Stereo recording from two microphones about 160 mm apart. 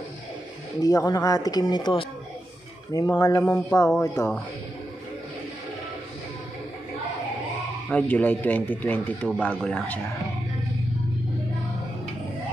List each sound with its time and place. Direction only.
0.7 s speech: 20° left (ahead or behind)
7.9 s speech: 10° left (ahead or behind)